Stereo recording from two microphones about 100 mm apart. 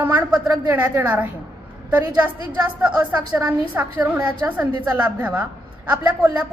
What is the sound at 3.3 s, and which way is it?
A woman's voice, 15° right (ahead or behind).